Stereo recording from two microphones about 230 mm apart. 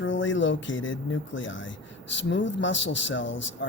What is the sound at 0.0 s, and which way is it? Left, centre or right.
Speech, left.